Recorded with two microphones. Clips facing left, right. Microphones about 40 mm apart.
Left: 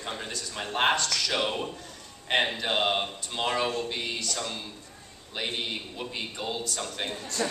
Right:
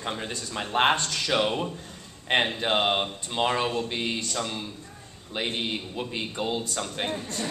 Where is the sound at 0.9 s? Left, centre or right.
Right.